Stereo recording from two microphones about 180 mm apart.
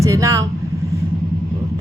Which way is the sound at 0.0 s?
15° right (ahead or behind).